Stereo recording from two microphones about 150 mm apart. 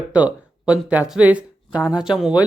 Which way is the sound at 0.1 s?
10° right (ahead or behind).